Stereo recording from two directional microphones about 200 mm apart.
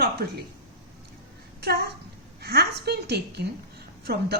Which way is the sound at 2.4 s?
50° right (ahead or behind).